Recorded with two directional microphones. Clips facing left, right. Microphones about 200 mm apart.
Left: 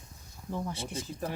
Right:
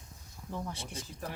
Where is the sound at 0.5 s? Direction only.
5° left (ahead or behind).